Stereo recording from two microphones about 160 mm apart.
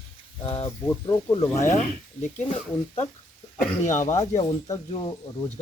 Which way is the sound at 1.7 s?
50° left (ahead or behind).